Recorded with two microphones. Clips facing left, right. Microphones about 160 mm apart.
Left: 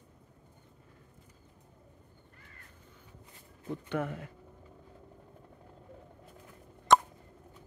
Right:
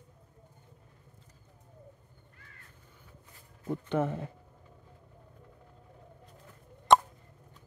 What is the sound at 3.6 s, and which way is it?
Speech, 25° right (ahead or behind).